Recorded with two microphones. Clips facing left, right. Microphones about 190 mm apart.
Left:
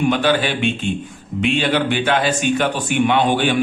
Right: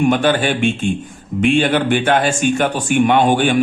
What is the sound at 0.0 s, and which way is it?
Speech, 45° right (ahead or behind).